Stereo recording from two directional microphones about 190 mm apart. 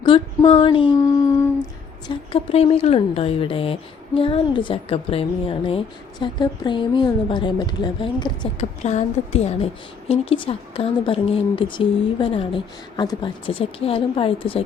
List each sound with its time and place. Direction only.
0.0 s a sound: 25° left (ahead or behind)
2.0 s speech: 30° left (ahead or behind)
8.8 s a woman's voice: 35° left (ahead or behind)